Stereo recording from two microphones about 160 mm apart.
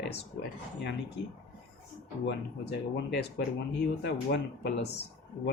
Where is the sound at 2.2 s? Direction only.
90° left.